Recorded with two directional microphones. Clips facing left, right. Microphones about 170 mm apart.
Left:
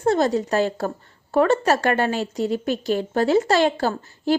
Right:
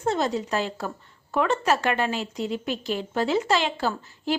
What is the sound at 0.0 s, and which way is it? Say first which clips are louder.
A woman's voice: left 6 dB; 40° left (ahead or behind).